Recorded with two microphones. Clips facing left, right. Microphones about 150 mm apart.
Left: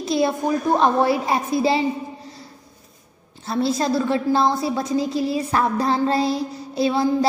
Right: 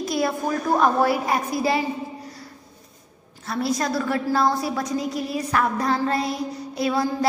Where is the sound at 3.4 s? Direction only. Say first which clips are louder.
Left 3 dB; 25° left (ahead or behind).